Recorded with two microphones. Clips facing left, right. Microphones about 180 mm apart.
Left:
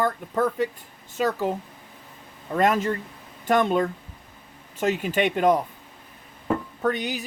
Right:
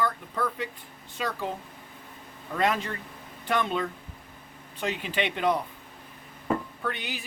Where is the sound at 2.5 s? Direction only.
45° left (ahead or behind).